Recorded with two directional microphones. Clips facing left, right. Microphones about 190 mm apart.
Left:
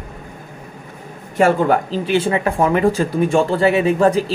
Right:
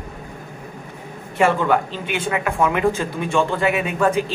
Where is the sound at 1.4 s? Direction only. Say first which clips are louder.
Left 3 dB; 40° left (ahead or behind).